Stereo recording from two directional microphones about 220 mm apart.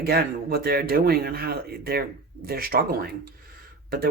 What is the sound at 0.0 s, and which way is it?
Speech, 45° right (ahead or behind).